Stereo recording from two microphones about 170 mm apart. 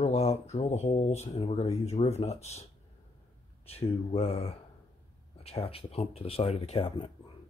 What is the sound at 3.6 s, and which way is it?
Speech, 35° left (ahead or behind).